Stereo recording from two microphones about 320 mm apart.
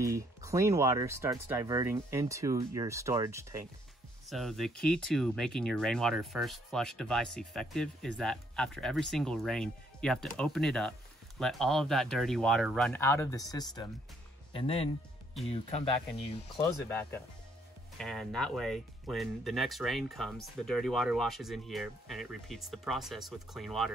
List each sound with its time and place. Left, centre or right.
0.0 s speech: centre
16.3 s speech: centre
17.9 s speech: centre